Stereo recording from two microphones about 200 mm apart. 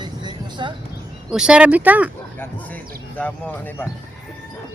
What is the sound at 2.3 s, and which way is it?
Speech, 10° left (ahead or behind).